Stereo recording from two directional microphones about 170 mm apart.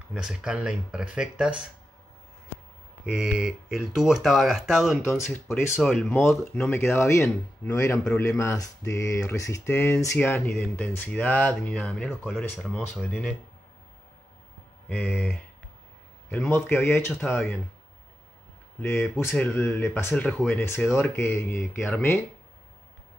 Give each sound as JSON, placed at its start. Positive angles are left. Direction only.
{"t": 0.1, "sound": "speech", "side_deg": -5}
{"t": 3.1, "sound": "speech", "side_deg": -5}
{"t": 5.0, "sound": "speech", "side_deg": 10}
{"t": 5.8, "sound": "speech", "side_deg": 0}
{"t": 15.0, "sound": "speech", "side_deg": 5}
{"t": 18.8, "sound": "speech", "side_deg": 15}